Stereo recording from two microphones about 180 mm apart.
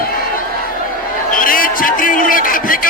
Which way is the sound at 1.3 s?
50° left (ahead or behind).